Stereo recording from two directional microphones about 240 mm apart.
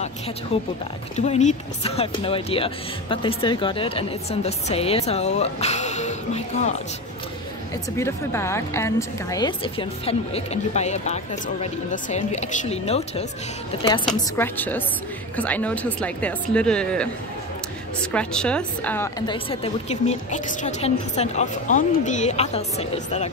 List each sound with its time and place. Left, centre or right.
1.1 s speech: left
8.0 s speech: centre; by 13.2 s left
14.0 s a woman's voice: centre
18.1 s speech: centre; by 23.3 s left